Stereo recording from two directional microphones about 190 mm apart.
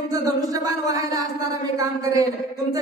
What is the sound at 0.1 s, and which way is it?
A woman's voice, 20° right (ahead or behind).